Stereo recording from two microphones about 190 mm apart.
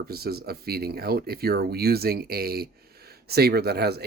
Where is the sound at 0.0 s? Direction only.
55° right (ahead or behind).